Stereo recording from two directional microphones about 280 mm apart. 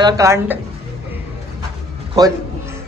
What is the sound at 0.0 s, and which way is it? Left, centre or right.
Speech, centre.